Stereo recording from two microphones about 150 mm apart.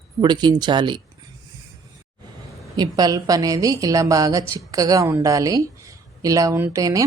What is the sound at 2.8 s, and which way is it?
Speech, 25° right (ahead or behind).